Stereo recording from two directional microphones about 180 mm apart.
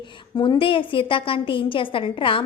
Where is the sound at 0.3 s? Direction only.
25° left (ahead or behind).